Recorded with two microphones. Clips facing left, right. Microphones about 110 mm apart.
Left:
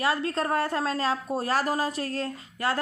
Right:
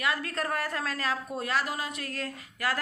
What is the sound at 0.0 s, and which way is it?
A woman's voice, 30° left (ahead or behind).